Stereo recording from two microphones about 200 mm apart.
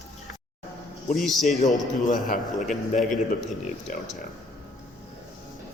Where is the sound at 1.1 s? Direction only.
Centre (ahead or behind).